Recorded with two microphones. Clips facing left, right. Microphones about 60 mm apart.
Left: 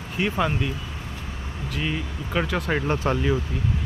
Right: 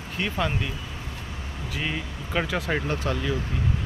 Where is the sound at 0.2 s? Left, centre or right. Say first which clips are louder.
Left 3 dB; centre.